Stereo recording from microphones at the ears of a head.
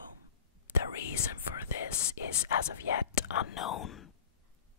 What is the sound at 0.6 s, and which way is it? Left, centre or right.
Whispering, left.